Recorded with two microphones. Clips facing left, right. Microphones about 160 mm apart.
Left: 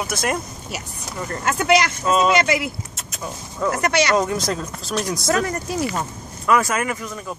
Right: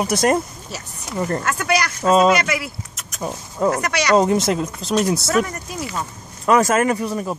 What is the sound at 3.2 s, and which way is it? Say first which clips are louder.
Speech: right 4 dB; 35° right (ahead or behind).